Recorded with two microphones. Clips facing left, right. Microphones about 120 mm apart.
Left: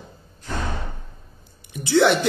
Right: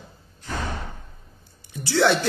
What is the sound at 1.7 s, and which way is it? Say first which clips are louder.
Speech: left 3 dB; 20° left (ahead or behind).